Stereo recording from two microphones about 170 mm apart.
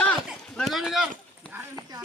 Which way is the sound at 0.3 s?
Centre (ahead or behind).